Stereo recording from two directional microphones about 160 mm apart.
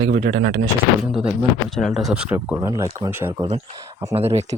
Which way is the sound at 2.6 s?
25° right (ahead or behind).